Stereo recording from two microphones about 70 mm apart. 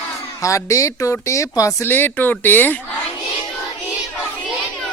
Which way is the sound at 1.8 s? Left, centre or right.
Left.